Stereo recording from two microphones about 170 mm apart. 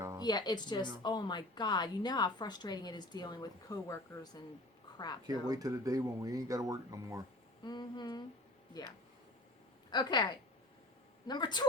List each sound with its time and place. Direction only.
0.2 s a woman's voice: 25° left (ahead or behind)
5.2 s speech: 20° right (ahead or behind)
7.6 s a woman's voice: 25° left (ahead or behind)
9.9 s a woman's voice: 25° left (ahead or behind)